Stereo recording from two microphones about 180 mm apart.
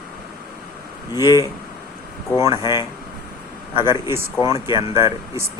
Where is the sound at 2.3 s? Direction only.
15° right (ahead or behind).